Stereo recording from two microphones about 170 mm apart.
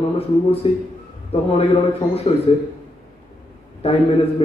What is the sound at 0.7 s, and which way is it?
Speech, 30° left (ahead or behind).